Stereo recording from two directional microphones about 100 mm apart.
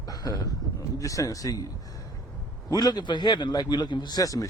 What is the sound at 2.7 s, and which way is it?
A man's voice, 45° left (ahead or behind).